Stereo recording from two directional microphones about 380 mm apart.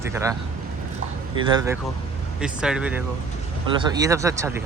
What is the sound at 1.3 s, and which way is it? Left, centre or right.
Speech, centre.